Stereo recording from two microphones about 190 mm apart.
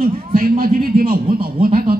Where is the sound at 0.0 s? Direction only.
50° right (ahead or behind).